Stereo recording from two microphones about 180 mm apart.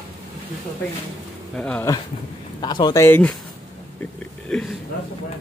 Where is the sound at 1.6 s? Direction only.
10° left (ahead or behind).